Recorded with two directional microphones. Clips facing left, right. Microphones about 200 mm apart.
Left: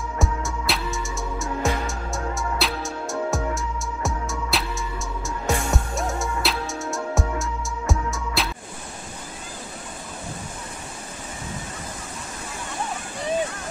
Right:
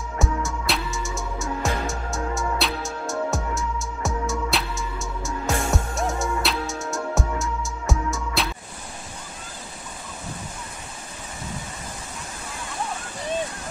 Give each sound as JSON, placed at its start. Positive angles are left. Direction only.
{"t": 0.2, "sound": "music", "side_deg": 0}